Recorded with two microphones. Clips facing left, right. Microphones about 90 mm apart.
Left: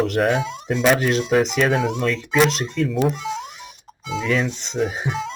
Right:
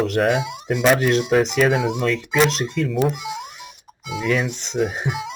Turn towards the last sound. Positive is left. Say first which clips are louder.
# even
turn(degrees=-15)  # may be behind; listen again after turning